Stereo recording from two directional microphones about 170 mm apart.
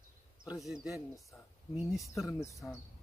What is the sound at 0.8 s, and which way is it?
Speech, centre (ahead or behind).